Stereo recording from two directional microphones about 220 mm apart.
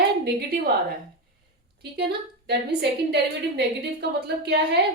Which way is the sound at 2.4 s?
50° right (ahead or behind).